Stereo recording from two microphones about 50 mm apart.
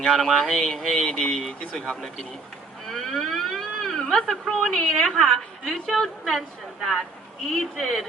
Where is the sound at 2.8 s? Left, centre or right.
Centre.